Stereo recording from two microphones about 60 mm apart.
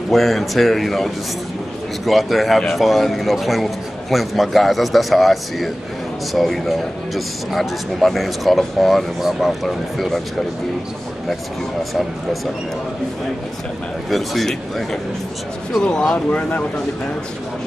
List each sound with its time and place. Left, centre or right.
0.1 s a man's voice: centre
14.1 s a man's voice: centre